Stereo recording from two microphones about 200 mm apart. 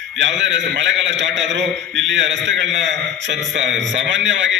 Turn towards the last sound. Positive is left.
turn(degrees=-65)  # may be behind; listen again after turning